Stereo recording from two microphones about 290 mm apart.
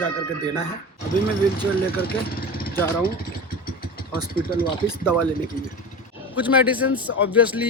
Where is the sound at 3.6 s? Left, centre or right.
Left.